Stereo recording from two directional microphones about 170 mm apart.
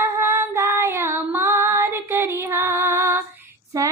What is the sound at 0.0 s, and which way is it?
Child singing, 15° right (ahead or behind).